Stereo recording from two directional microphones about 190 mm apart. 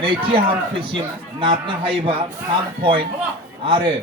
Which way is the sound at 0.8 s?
25° right (ahead or behind).